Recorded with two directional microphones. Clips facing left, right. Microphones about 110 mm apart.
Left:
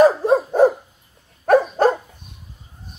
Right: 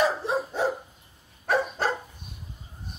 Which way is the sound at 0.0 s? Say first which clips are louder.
Left 11 dB; 50° left (ahead or behind).